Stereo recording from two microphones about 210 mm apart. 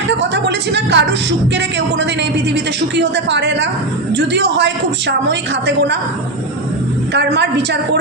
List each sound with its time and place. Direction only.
0.1 s music: 55° right (ahead or behind)
2.9 s a woman's voice: 55° right (ahead or behind)
7.1 s a woman's voice: 55° right (ahead or behind)